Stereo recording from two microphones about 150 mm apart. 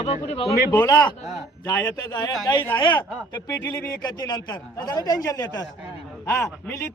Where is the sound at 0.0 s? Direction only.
40° left (ahead or behind).